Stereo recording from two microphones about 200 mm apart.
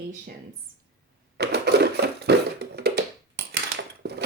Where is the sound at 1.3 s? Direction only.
55° right (ahead or behind).